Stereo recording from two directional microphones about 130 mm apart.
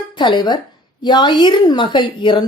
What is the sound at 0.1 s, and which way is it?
Speech, 35° left (ahead or behind).